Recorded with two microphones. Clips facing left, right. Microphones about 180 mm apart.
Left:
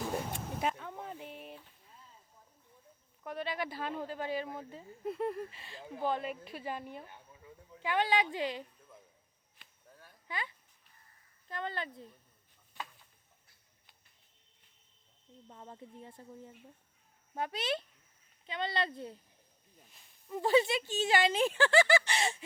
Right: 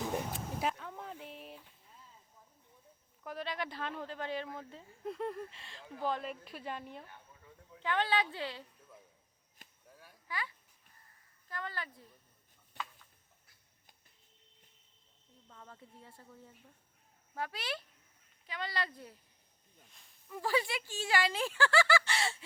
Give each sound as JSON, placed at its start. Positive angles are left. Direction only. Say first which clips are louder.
{"t": 0.0, "sound": "music", "louder": "even", "side_deg": 0}
{"t": 3.2, "sound": "speech", "louder": "left 2 dB", "side_deg": 0}
{"t": 9.9, "sound": "a sound", "louder": "left 1 dB", "side_deg": -10}
{"t": 10.2, "sound": "speech", "louder": "left 1 dB", "side_deg": 20}
{"t": 15.4, "sound": "speech", "louder": "left 5 dB", "side_deg": 25}
{"t": 20.2, "sound": "speech", "louder": "left 6 dB", "side_deg": 25}